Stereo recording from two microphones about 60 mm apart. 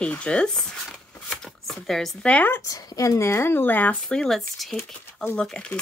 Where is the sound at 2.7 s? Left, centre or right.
Left.